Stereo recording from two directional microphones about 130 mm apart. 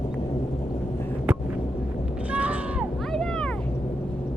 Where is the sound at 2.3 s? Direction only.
10° right (ahead or behind).